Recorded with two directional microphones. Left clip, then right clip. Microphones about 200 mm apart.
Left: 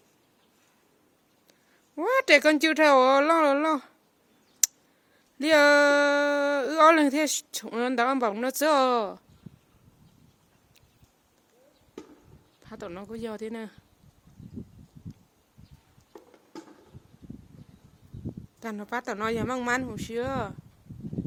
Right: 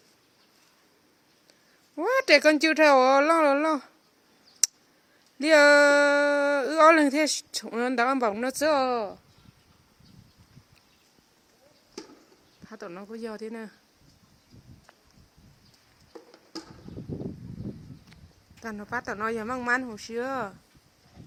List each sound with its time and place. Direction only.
2.0 s speech: 5° left (ahead or behind)
5.4 s speech: centre (ahead or behind); by 9.1 s 20° left (ahead or behind)
12.6 s speech: 15° left (ahead or behind)
18.6 s speech: 20° left (ahead or behind)